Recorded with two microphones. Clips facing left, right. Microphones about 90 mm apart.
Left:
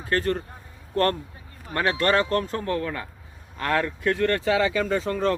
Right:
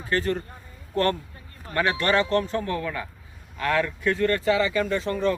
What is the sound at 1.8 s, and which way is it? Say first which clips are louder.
Speech: left 1 dB; 35° left (ahead or behind).